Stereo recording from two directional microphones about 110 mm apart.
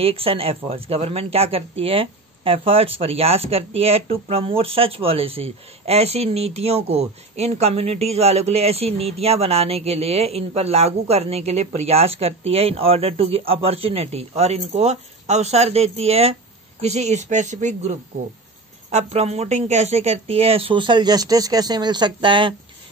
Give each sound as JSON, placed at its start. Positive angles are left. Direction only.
{"t": 0.0, "sound": "speech", "side_deg": -60}
{"t": 16.8, "sound": "speech", "side_deg": -90}
{"t": 18.9, "sound": "speech", "side_deg": -80}